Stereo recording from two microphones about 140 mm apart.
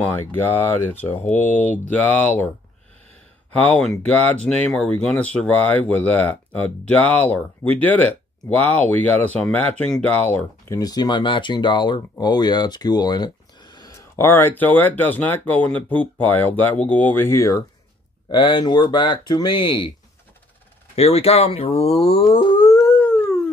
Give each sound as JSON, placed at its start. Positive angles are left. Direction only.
{"t": 0.0, "sound": "speech", "side_deg": 15}
{"t": 1.3, "sound": "speech", "side_deg": 60}
{"t": 1.9, "sound": "speech", "side_deg": 10}
{"t": 3.6, "sound": "speech", "side_deg": 10}
{"t": 10.8, "sound": "speech", "side_deg": 30}
{"t": 18.3, "sound": "speech", "side_deg": 35}
{"t": 20.9, "sound": "speech", "side_deg": 45}
{"t": 22.7, "sound": "howl", "side_deg": 20}